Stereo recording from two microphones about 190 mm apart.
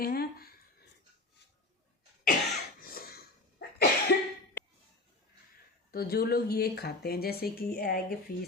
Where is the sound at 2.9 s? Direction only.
50° left (ahead or behind).